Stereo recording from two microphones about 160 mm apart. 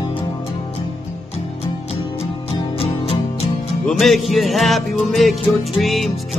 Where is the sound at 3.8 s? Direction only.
Centre (ahead or behind).